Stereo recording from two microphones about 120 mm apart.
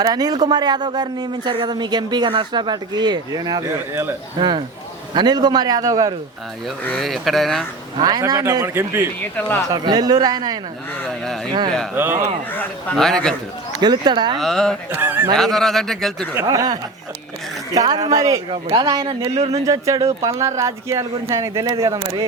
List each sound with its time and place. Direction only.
0.0 s speech: 35° right (ahead or behind)
6.9 s speech: centre (ahead or behind)
7.9 s speech: 35° right (ahead or behind)
9.7 s speech: 35° right (ahead or behind)
11.9 s speech: 20° right (ahead or behind)
12.5 s speech: 5° left (ahead or behind)
13.7 s speech: 35° right (ahead or behind)
14.3 s speech: 5° left (ahead or behind)
14.8 s speech: 15° right (ahead or behind)
15.4 s speech: centre (ahead or behind)
16.3 s speech: 25° right (ahead or behind)
19.3 s speech: 60° right (ahead or behind)
19.6 s speech: 30° right (ahead or behind)